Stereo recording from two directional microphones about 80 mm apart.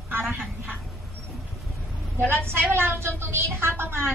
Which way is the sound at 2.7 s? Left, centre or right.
Right.